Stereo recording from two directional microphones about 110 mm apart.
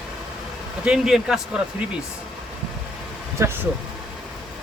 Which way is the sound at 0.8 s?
5° right (ahead or behind).